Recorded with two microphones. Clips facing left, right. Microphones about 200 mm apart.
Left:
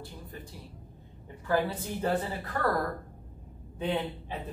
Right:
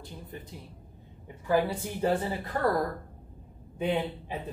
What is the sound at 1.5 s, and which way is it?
A woman's voice, 15° right (ahead or behind).